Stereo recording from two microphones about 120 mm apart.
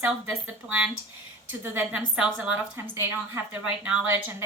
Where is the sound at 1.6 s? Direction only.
20° right (ahead or behind).